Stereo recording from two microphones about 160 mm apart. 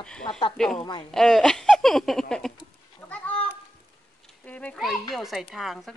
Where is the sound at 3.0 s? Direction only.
10° left (ahead or behind).